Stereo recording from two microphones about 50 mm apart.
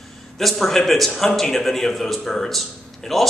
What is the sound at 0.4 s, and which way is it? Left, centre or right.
A man's voice, centre.